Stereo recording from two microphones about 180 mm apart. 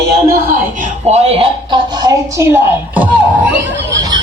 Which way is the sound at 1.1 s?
35° right (ahead or behind).